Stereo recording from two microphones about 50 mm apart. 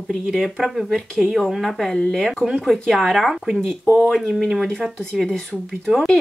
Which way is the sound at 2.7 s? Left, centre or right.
Centre.